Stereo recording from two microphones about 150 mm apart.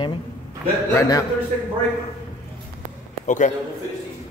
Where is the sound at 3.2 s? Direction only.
55° left (ahead or behind).